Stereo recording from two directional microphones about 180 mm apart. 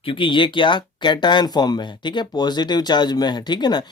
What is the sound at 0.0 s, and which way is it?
Speech, 30° left (ahead or behind).